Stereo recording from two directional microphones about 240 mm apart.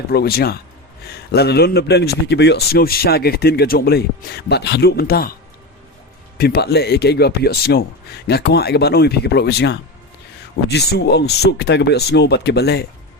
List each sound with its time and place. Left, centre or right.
0.1 s a man's voice: left
6.3 s a man's voice: left